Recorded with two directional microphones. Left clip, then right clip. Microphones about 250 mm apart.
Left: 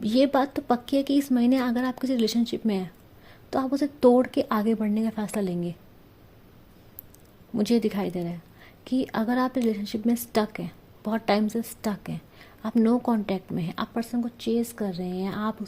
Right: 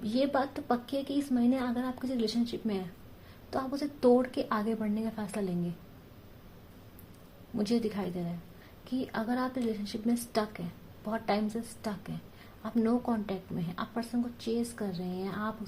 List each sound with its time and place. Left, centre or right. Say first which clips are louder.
0.1 s a woman's voice: left 7 dB; left
7.5 s a woman's voice: left 7 dB; left